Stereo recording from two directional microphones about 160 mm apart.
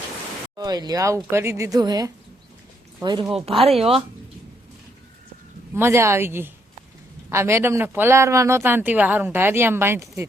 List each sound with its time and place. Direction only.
0.5 s speech: 25° right (ahead or behind)
5.7 s speech: 15° right (ahead or behind)